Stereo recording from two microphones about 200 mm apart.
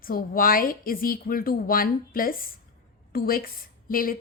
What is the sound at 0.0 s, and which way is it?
A woman's voice, 45° left (ahead or behind).